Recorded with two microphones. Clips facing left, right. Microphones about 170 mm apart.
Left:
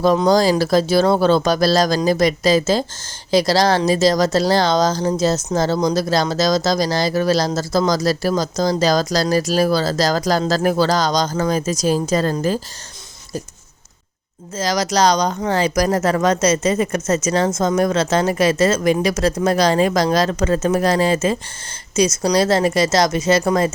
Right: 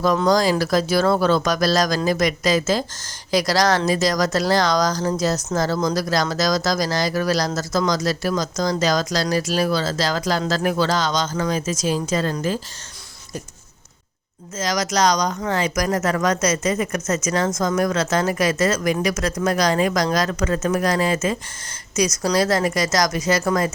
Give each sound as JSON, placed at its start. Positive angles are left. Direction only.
{"t": 0.2, "sound": "speech", "side_deg": 30}
{"t": 14.5, "sound": "speech", "side_deg": 30}